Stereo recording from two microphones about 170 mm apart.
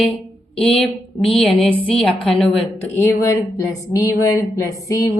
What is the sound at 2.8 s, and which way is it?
A woman's voice, 15° left (ahead or behind).